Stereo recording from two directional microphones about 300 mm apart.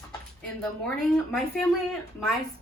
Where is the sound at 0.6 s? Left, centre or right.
Centre.